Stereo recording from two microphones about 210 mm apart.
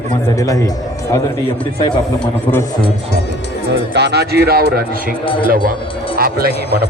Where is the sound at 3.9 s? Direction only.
55° right (ahead or behind).